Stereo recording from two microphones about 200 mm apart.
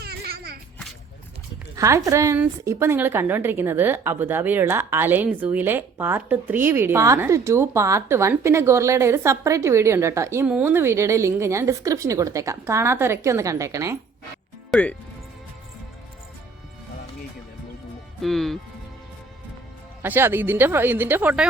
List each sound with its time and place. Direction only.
0.0 s whip: 50° right (ahead or behind)
1.7 s a woman's voice: 15° right (ahead or behind)
14.7 s speech: 5° left (ahead or behind)
18.2 s speech: centre (ahead or behind)
20.0 s a woman's voice: 10° right (ahead or behind)